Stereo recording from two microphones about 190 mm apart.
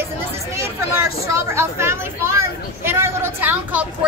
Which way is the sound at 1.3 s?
15° right (ahead or behind).